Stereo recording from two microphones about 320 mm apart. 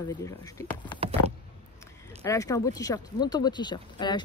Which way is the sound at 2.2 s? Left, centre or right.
Centre.